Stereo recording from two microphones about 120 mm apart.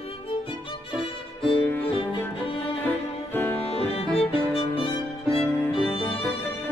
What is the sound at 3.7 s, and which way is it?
Music, 55° left (ahead or behind).